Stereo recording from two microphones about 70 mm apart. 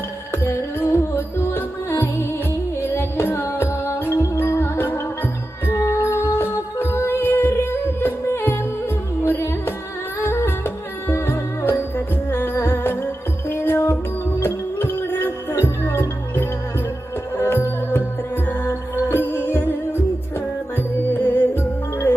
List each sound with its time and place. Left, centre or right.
0.4 s music: left
10.2 s music: left
21.1 s music: left